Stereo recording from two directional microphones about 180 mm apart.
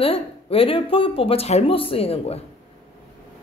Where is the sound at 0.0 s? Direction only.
30° left (ahead or behind).